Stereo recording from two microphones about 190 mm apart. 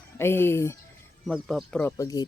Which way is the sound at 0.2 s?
10° left (ahead or behind).